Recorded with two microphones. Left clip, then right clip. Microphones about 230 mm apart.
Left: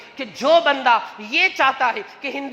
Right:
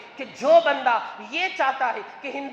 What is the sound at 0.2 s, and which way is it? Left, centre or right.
A woman's voice, left.